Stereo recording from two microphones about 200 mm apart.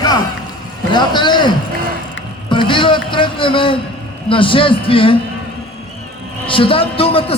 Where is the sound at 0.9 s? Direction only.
20° left (ahead or behind).